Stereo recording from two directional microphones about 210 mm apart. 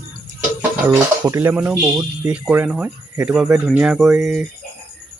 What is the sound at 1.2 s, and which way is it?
Speech, 10° right (ahead or behind).